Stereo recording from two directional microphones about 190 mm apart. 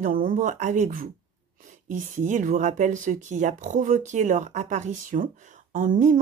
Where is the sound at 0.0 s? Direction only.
45° right (ahead or behind).